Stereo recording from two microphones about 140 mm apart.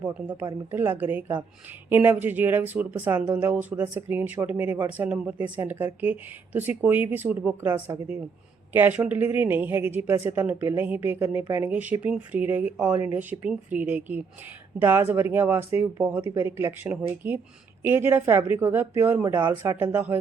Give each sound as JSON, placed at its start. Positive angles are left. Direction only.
{"t": 0.0, "sound": "a woman's voice", "side_deg": -15}